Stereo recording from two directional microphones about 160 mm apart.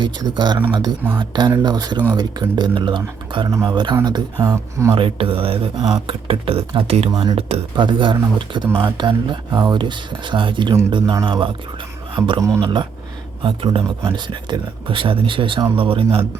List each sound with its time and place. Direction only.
0.0 s speech: 25° right (ahead or behind)
4.9 s speech: 35° right (ahead or behind)